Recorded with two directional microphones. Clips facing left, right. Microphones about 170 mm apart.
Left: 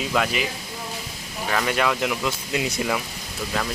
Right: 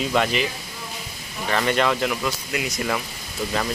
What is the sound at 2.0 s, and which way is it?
Speech, 15° left (ahead or behind).